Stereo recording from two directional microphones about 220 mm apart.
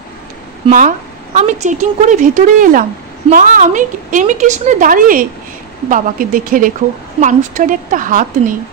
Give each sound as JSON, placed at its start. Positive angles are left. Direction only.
{"t": 0.7, "sound": "a woman's voice", "side_deg": -35}